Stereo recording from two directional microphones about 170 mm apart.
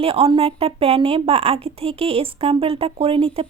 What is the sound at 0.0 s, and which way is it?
A woman's voice, 35° right (ahead or behind).